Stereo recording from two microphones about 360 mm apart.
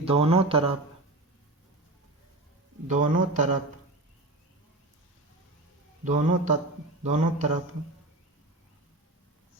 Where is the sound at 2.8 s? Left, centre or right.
Right.